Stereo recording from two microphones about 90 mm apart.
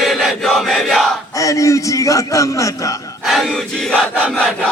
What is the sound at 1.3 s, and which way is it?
A man's voice, 35° left (ahead or behind).